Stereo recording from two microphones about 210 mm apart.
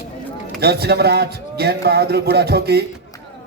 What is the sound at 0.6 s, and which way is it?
A man's voice, 50° right (ahead or behind).